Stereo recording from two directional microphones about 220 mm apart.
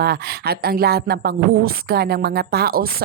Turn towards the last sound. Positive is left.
turn(degrees=-45)  # may be behind; listen again after turning